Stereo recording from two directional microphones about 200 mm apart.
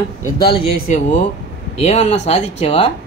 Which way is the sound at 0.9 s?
35° left (ahead or behind).